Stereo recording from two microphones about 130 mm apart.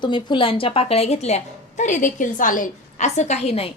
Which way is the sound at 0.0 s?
35° left (ahead or behind).